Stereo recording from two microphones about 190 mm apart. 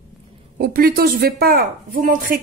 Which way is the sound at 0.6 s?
50° right (ahead or behind).